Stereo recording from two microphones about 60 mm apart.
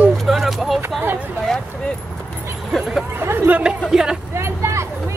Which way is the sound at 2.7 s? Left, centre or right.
Centre.